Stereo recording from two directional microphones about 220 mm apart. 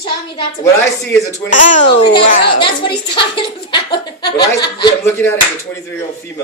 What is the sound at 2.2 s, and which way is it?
Speech, 40° left (ahead or behind).